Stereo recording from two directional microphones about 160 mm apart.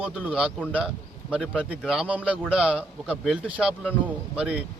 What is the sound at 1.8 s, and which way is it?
Speech, 5° right (ahead or behind).